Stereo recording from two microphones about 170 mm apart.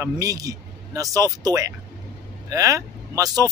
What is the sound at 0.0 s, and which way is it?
A man's voice, 20° right (ahead or behind).